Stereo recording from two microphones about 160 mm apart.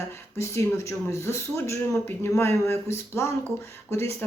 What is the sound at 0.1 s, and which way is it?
A woman's voice, 15° left (ahead or behind).